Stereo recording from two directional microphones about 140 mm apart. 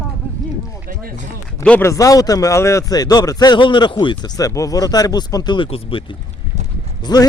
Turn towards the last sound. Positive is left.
turn(degrees=30)  # may be behind; listen again after turning